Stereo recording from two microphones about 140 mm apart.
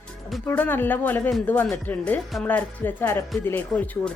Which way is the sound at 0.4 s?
10° left (ahead or behind).